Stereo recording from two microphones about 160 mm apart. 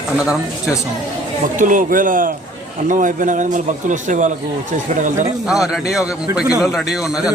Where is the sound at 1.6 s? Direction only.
55° right (ahead or behind).